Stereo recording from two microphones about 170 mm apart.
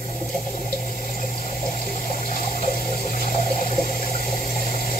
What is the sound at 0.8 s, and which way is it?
Water, 60° left (ahead or behind).